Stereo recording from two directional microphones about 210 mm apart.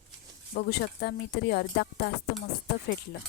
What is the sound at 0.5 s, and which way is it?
Speech, 50° left (ahead or behind).